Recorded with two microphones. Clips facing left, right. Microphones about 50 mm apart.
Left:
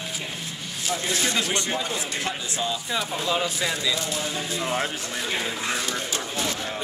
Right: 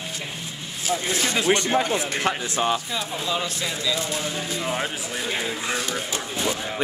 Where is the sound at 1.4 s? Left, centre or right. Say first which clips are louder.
Right 6 dB; right.